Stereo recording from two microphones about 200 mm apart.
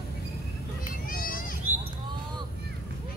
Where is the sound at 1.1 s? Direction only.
45° left (ahead or behind).